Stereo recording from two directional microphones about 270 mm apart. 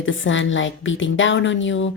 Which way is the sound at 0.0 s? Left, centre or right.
Left.